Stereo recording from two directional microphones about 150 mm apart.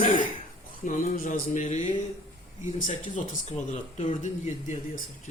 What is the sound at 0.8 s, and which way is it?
Speech, 60° left (ahead or behind).